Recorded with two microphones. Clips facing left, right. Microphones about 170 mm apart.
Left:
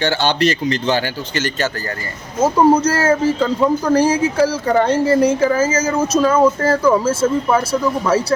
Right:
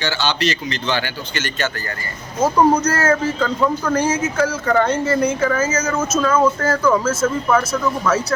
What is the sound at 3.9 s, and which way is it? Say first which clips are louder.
A woman's voice: left 5 dB; 35° left (ahead or behind).